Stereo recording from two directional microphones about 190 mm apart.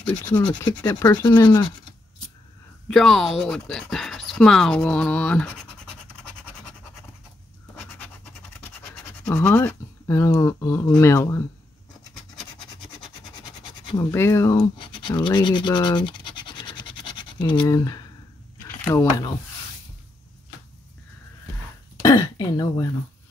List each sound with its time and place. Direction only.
0.4 s speech: 25° left (ahead or behind)
2.9 s speech: centre (ahead or behind)
9.3 s speech: 10° left (ahead or behind)
13.9 s speech: 15° left (ahead or behind)
22.0 s speech: 20° left (ahead or behind)